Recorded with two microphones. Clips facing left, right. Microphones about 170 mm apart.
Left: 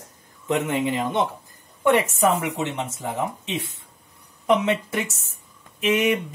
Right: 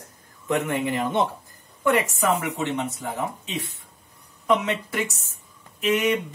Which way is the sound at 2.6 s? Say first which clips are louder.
Right 1 dB; 20° left (ahead or behind).